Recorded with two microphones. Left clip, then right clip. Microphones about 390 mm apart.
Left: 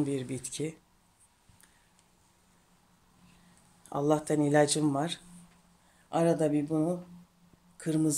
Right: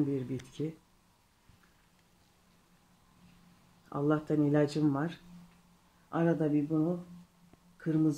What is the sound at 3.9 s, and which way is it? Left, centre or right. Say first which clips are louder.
Speech: left 3 dB; centre.